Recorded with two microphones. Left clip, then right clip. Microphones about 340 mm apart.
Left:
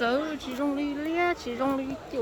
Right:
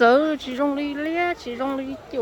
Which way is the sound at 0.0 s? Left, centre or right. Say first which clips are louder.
Right 11 dB; centre.